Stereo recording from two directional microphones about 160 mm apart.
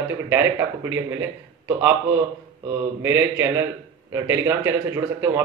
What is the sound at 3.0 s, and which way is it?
A man's voice, 15° right (ahead or behind).